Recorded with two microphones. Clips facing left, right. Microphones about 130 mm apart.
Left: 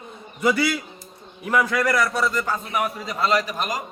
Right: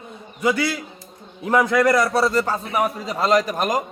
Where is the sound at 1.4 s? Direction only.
25° right (ahead or behind).